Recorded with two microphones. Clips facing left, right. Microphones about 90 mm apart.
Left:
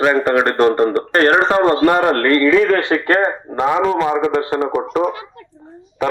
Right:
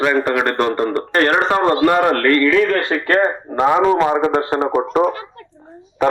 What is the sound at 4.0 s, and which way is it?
A man's voice, 45° right (ahead or behind).